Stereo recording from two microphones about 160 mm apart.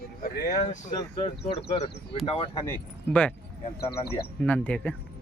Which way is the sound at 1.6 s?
35° left (ahead or behind).